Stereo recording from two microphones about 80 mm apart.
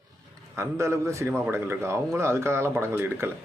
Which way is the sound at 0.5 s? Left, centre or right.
Right.